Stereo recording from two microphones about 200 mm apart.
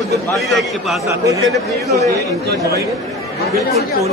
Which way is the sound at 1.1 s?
15° right (ahead or behind).